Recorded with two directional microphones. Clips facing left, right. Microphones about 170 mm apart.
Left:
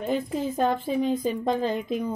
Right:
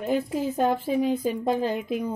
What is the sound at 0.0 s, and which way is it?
Speech, 10° right (ahead or behind).